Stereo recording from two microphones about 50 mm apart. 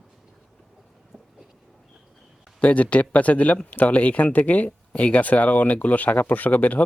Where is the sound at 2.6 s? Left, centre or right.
Left.